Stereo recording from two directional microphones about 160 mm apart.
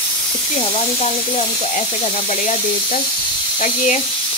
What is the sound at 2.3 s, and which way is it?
Sizzle, 55° left (ahead or behind).